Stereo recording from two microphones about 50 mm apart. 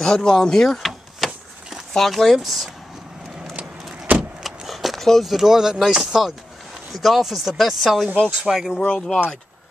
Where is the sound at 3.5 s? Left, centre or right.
Centre.